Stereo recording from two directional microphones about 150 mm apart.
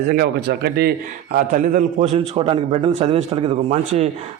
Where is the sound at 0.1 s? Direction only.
90° right.